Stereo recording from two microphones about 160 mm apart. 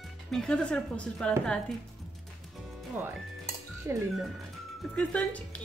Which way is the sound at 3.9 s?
15° right (ahead or behind).